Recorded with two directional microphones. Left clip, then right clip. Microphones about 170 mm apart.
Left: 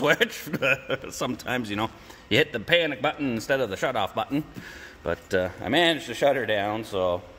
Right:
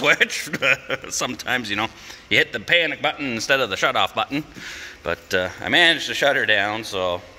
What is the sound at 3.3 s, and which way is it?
A man's voice, 15° left (ahead or behind).